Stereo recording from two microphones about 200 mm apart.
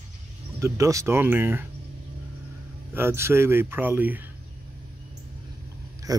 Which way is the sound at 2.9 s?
10° right (ahead or behind).